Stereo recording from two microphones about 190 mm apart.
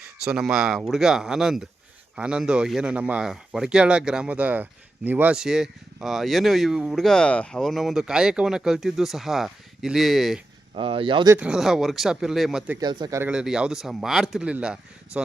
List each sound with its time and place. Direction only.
0.3 s speech: 5° right (ahead or behind)
10.8 s speech: 30° right (ahead or behind)
11.3 s speech: 5° right (ahead or behind)
12.8 s speech: 20° right (ahead or behind); by 15.2 s 5° right (ahead or behind)